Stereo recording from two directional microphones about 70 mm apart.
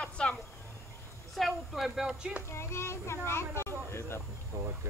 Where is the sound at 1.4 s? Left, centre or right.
Centre.